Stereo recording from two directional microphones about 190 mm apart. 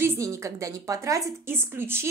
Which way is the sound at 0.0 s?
15° right (ahead or behind).